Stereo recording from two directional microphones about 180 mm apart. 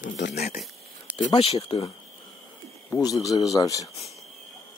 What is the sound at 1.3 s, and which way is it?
Speech, 35° left (ahead or behind).